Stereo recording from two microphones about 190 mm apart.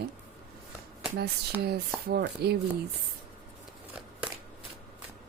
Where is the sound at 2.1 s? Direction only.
60° right (ahead or behind).